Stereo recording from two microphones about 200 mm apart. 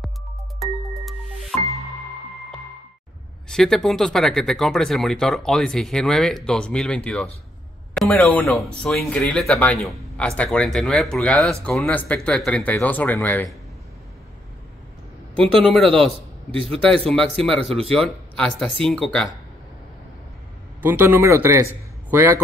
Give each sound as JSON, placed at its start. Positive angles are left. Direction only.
{"t": 0.6, "sound": "music", "side_deg": 0}
{"t": 3.4, "sound": "speech", "side_deg": 5}
{"t": 15.3, "sound": "speech", "side_deg": 5}
{"t": 16.5, "sound": "speech", "side_deg": -30}
{"t": 16.8, "sound": "speech", "side_deg": 5}
{"t": 20.8, "sound": "speech", "side_deg": -10}